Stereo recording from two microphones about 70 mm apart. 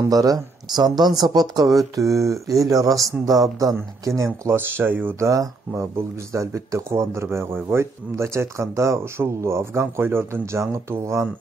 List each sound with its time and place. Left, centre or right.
0.1 s speech: right
2.0 s speech: right
4.0 s speech: right
5.2 s speech: right
5.7 s speech: right